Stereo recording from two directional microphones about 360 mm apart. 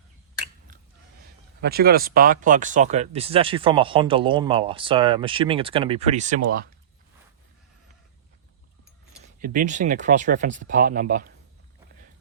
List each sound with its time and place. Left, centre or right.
1.6 s speech: right
9.4 s speech: right